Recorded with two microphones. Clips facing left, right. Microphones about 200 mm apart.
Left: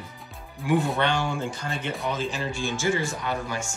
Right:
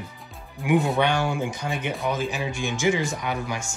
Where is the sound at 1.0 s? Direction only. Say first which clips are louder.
Right 3 dB; 10° right (ahead or behind).